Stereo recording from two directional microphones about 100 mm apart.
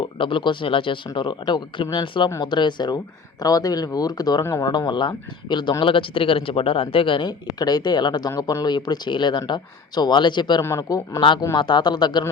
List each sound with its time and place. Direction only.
0.0 s speech: 55° left (ahead or behind); by 4.7 s 35° left (ahead or behind)
4.7 s speech: 50° left (ahead or behind)
10.6 s a man's voice: 25° left (ahead or behind)
11.5 s speech: 50° left (ahead or behind)